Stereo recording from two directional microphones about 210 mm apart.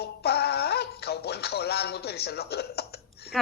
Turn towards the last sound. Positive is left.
turn(degrees=50)  # may be behind; listen again after turning